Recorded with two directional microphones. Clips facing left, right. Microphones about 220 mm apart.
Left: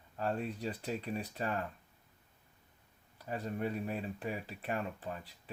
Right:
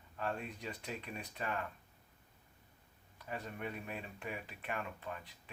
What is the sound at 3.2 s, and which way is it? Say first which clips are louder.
Speech: left 6 dB; 35° left (ahead or behind).